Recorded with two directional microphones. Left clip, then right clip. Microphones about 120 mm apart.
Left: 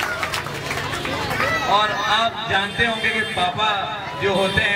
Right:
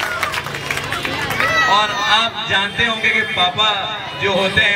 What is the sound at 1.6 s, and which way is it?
A man's voice, 10° right (ahead or behind).